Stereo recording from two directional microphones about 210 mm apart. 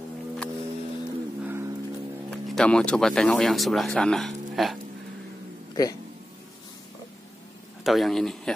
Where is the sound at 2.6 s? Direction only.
5° left (ahead or behind).